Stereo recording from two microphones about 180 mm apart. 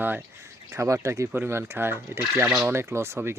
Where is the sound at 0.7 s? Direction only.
15° right (ahead or behind).